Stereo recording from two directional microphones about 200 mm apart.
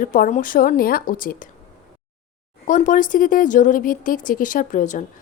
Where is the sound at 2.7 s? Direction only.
40° left (ahead or behind).